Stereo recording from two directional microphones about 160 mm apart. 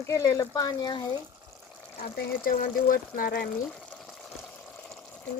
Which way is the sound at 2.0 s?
60° left (ahead or behind).